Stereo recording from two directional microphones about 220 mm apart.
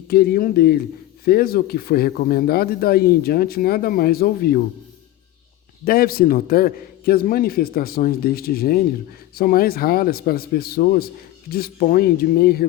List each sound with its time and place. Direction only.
0.1 s speech: 45° left (ahead or behind)
5.8 s speech: 40° left (ahead or behind)